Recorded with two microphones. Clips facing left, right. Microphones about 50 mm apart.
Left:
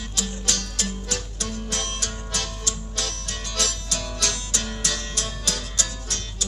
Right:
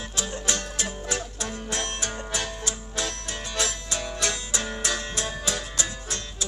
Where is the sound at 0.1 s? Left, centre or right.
Centre.